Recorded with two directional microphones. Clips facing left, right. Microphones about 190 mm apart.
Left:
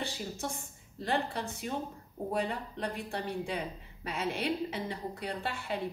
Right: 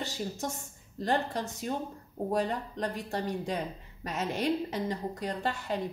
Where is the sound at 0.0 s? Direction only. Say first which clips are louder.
Right 2 dB; 40° right (ahead or behind).